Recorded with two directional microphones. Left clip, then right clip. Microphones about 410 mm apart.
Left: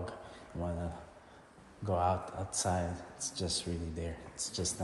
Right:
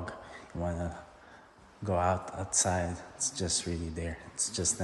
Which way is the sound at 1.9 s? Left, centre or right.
Centre.